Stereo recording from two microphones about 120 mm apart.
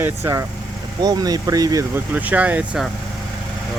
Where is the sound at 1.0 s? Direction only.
35° right (ahead or behind).